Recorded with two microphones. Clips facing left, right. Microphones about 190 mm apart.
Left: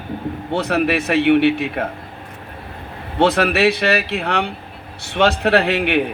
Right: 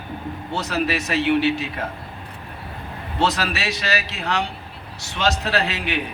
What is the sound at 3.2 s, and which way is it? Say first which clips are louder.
Speech: left 8 dB; 60° left (ahead or behind).